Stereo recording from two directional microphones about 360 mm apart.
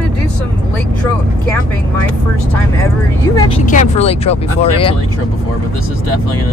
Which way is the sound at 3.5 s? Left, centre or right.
Centre.